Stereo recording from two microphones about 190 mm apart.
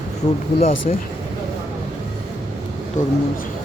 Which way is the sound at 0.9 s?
45° left (ahead or behind).